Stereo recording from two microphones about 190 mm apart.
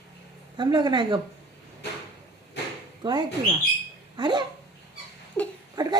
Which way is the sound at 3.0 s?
25° right (ahead or behind).